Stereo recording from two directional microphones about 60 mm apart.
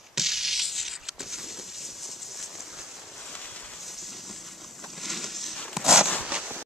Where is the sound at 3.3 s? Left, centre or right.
Left.